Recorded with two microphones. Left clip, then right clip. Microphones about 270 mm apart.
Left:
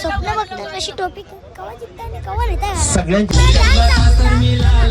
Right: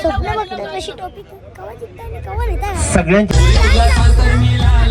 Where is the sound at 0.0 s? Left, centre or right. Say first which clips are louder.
Right 2 dB; centre.